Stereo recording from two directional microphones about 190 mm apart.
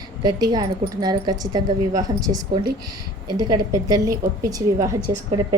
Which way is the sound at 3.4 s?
20° right (ahead or behind).